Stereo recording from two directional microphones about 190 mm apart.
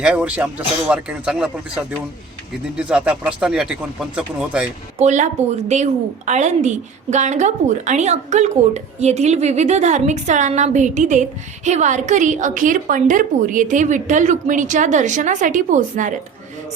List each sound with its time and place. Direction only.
0.0 s speech: 5° right (ahead or behind)
4.9 s a woman's voice: 40° right (ahead or behind)